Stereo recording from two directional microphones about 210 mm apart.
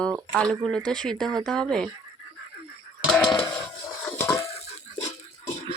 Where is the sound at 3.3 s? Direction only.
20° left (ahead or behind).